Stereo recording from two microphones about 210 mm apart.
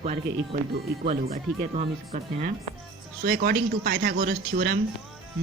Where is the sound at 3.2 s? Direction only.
50° right (ahead or behind).